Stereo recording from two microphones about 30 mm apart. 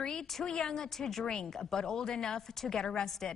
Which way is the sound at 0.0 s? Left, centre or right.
Left.